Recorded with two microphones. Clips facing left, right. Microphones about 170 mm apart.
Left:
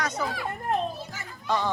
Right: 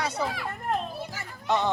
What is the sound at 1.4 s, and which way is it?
Speech, 20° right (ahead or behind).